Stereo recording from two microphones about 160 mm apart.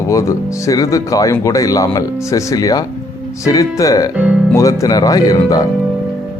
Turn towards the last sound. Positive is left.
turn(degrees=20)  # may be behind; listen again after turning